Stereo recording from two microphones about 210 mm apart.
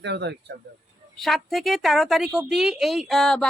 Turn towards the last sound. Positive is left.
turn(degrees=0)  # may be behind; listen again after turning